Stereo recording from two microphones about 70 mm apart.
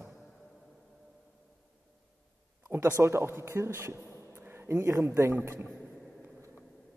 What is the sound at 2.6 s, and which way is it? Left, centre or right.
A man's voice, right.